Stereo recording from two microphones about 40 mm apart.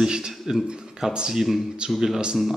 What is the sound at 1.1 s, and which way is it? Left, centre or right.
Speech, right.